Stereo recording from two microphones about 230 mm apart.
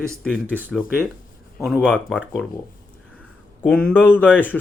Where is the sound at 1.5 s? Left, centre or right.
Centre.